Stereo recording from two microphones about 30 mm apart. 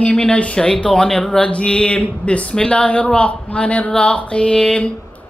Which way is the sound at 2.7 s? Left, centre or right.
Left.